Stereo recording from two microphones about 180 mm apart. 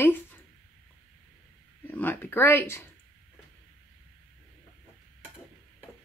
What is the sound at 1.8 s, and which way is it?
Speech, 10° left (ahead or behind).